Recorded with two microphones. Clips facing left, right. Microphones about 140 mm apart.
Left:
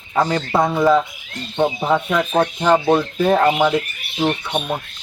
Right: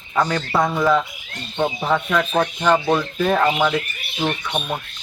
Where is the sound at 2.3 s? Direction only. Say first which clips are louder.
Left 3 dB; 25° left (ahead or behind).